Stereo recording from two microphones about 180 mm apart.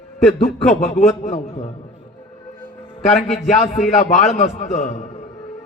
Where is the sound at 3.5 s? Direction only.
40° left (ahead or behind).